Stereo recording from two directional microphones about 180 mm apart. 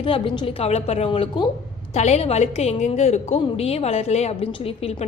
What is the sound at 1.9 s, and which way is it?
A woman's voice, 40° left (ahead or behind).